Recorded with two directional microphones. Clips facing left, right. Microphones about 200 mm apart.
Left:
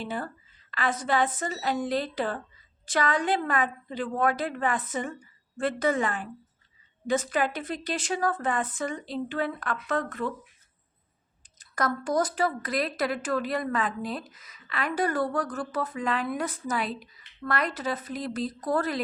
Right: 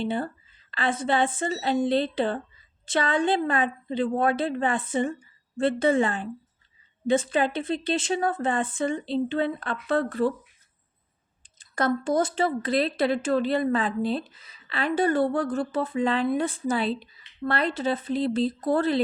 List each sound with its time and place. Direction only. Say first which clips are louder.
0.0 s speech: right 6 dB; 30° right (ahead or behind)
11.5 s speech: right 4 dB; 30° right (ahead or behind)